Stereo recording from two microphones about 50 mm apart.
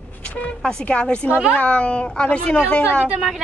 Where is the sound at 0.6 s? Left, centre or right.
Centre.